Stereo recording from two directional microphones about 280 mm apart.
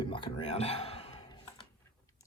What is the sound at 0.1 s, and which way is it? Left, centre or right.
Whispering, centre.